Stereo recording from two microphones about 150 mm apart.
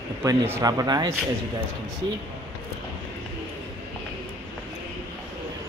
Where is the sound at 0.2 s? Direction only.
20° right (ahead or behind).